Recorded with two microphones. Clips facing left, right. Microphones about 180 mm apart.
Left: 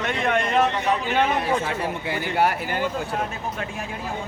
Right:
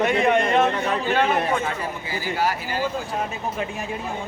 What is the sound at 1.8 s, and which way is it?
Speech, 65° left (ahead or behind).